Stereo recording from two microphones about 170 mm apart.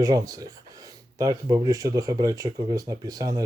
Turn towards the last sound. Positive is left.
turn(degrees=-20)  # may be behind; listen again after turning